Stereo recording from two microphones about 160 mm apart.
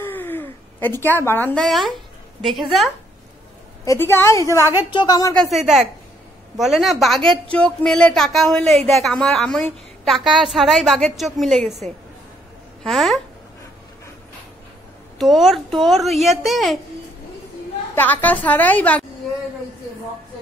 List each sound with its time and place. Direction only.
0.0 s a sound: 10° left (ahead or behind)
1.6 s a woman's voice: centre (ahead or behind)
3.8 s a woman's voice: 15° left (ahead or behind)
5.3 s a woman's voice: centre (ahead or behind)
15.1 s a woman's voice: centre (ahead or behind)
17.9 s a woman's voice: 10° left (ahead or behind)